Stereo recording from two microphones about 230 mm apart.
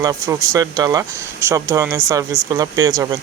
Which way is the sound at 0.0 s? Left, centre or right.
Centre.